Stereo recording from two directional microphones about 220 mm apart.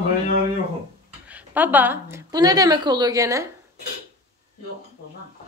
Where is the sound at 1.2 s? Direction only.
5° right (ahead or behind).